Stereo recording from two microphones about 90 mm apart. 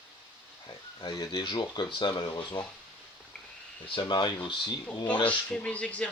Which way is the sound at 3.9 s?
65° left (ahead or behind).